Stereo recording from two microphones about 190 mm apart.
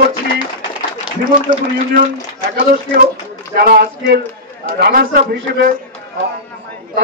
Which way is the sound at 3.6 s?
60° right (ahead or behind).